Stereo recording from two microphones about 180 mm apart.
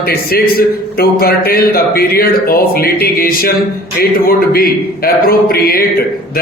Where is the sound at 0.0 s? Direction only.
60° left (ahead or behind).